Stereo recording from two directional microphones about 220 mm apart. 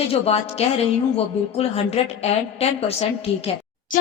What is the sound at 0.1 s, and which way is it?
Speech, 25° left (ahead or behind).